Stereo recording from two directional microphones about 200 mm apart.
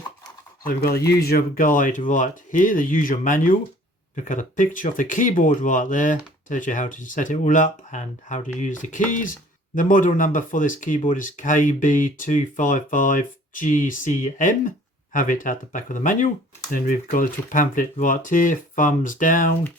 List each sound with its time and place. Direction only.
0.6 s speech: 50° left (ahead or behind)